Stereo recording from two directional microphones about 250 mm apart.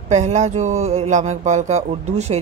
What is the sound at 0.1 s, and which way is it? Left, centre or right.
Speech, right.